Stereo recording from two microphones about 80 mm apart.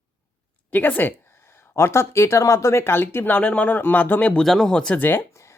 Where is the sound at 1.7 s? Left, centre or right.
Left; by 4.4 s centre.